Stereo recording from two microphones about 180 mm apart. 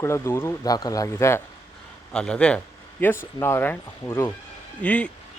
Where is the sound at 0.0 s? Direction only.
15° left (ahead or behind).